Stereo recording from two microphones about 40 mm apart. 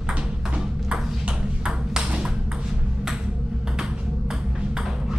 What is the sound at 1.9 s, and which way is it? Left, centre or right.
Ping, right.